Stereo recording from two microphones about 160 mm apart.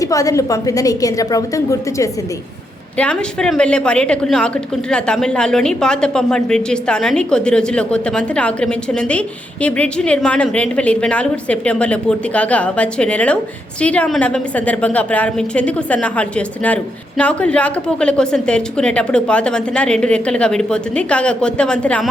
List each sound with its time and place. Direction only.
0.0 s a woman's voice: 20° left (ahead or behind)
3.0 s a woman's voice: 5° left (ahead or behind)